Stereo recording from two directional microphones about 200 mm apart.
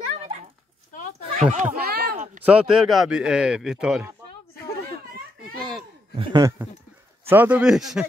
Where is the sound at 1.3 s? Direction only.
35° right (ahead or behind).